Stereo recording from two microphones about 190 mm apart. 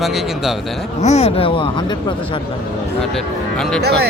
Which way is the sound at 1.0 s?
35° left (ahead or behind).